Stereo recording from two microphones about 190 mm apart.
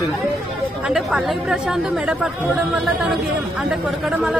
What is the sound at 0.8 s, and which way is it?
Speech, 5° right (ahead or behind).